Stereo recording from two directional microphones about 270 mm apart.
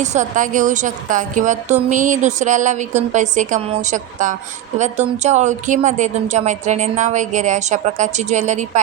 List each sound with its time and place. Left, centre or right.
0.0 s a woman's voice: right